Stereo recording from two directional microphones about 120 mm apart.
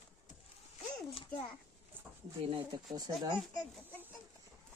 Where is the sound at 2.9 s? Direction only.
35° right (ahead or behind).